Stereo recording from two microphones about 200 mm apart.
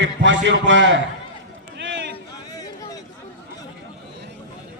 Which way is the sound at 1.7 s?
65° right (ahead or behind).